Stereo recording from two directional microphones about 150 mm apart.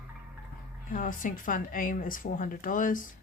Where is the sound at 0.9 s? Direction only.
65° left (ahead or behind).